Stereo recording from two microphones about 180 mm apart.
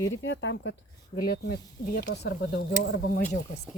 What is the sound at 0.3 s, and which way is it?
Speech, 90° left.